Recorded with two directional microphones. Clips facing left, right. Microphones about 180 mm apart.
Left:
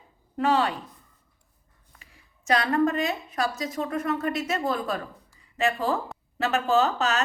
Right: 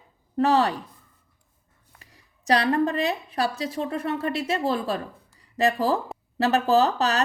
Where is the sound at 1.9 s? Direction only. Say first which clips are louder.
Right 1 dB; 35° right (ahead or behind).